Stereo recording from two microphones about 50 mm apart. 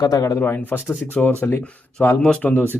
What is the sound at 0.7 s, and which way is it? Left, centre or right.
Speech, left.